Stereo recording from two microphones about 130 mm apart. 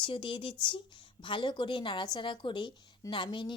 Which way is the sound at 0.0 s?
40° left (ahead or behind).